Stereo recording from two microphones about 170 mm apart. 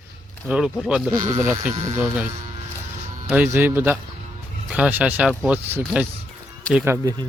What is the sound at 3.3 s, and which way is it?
Speech, 10° right (ahead or behind).